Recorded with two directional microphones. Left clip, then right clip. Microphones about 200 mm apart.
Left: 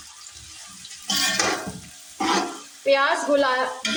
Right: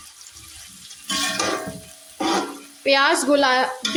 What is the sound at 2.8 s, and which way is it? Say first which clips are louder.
Speech: right 2 dB; 40° right (ahead or behind).